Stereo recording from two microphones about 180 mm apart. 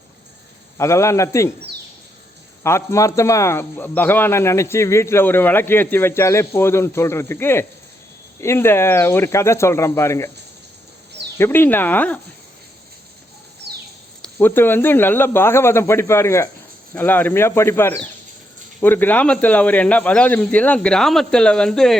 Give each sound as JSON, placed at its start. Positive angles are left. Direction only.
{"t": 0.8, "sound": "speech", "side_deg": 15}
{"t": 2.6, "sound": "speech", "side_deg": 15}
{"t": 11.3, "sound": "speech", "side_deg": 15}
{"t": 13.6, "sound": "a sound", "side_deg": -65}
{"t": 14.3, "sound": "speech", "side_deg": 10}